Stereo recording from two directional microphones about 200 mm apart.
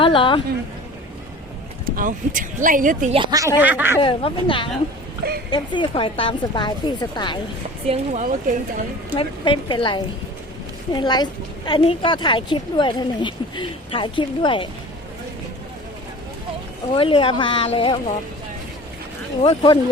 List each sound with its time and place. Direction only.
0.0 s a woman's voice: 25° left (ahead or behind)
2.0 s speech: 40° right (ahead or behind)
3.2 s speech: 20° right (ahead or behind)
3.6 s speech: 10° right (ahead or behind)
4.0 s a woman's voice: 25° left (ahead or behind)
7.9 s speech: 35° right (ahead or behind)
9.1 s a woman's voice: 25° left (ahead or behind)
16.9 s a woman's voice: 25° left (ahead or behind)
19.4 s a woman's voice: 25° left (ahead or behind)